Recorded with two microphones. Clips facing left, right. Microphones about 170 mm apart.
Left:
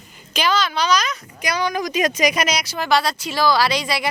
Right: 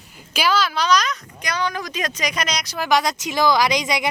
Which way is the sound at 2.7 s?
15° right (ahead or behind).